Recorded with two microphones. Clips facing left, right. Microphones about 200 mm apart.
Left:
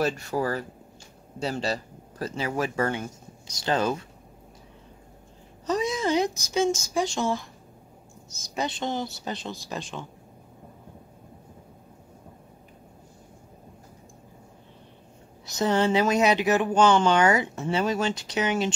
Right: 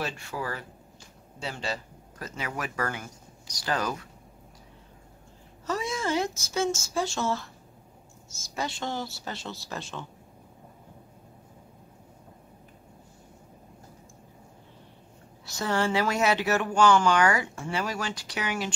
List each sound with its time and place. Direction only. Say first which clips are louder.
0.0 s speech: left 8 dB; 40° left (ahead or behind)
5.7 s speech: left 4 dB; 20° left (ahead or behind)
15.4 s speech: left 4 dB; 20° left (ahead or behind)